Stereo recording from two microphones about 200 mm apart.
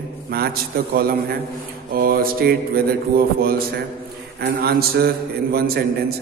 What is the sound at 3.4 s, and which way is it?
A man's voice, 50° right (ahead or behind).